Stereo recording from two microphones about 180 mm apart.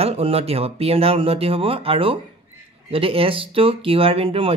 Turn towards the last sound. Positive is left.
turn(degrees=-30)  # may be behind; listen again after turning